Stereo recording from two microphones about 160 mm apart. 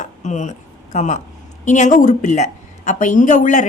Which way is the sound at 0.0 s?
50° left (ahead or behind).